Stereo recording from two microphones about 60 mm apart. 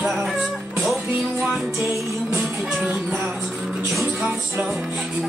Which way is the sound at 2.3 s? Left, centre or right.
Centre.